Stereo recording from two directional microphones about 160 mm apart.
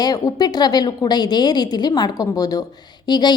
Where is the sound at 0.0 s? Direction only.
25° left (ahead or behind).